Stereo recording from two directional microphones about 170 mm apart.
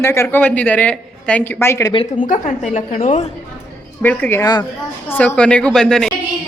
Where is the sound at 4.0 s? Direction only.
10° left (ahead or behind).